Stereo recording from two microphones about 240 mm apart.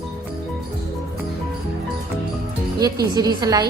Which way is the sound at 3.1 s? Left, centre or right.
Centre.